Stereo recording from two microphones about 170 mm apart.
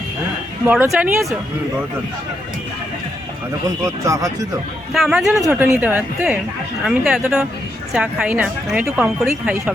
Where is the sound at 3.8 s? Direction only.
20° right (ahead or behind).